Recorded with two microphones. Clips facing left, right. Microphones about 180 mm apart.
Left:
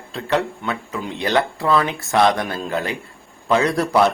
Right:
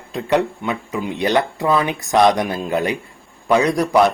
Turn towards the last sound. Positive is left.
turn(degrees=-15)  # may be behind; listen again after turning